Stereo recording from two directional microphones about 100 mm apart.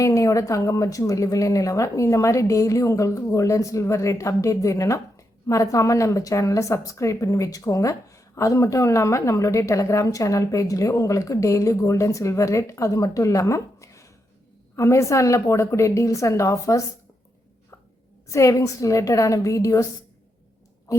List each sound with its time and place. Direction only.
0.0 s speech: 35° left (ahead or behind)
18.3 s speech: 30° left (ahead or behind)